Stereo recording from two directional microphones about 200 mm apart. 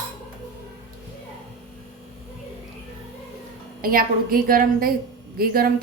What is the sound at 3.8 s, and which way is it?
A woman's voice, 45° right (ahead or behind).